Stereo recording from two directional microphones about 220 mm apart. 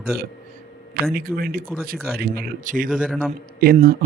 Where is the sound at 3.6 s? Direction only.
40° right (ahead or behind).